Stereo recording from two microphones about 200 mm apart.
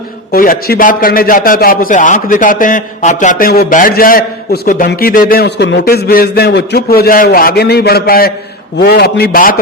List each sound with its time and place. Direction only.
0.3 s a man's voice: 45° left (ahead or behind)